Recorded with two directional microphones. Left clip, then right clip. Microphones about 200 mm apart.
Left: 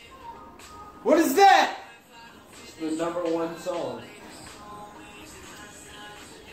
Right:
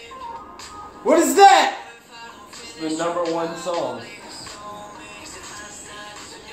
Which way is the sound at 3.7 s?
30° right (ahead or behind).